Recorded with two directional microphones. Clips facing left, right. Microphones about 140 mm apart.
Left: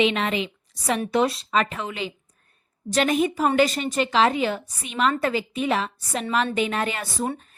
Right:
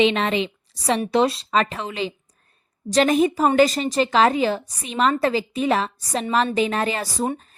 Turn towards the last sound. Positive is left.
turn(degrees=-35)  # may be behind; listen again after turning